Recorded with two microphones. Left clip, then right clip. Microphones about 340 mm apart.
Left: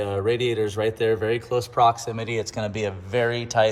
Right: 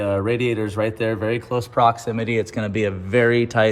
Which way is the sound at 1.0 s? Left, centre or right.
Left.